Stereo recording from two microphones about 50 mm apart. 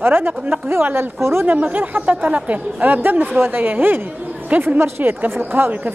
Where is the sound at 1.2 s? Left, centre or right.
Right.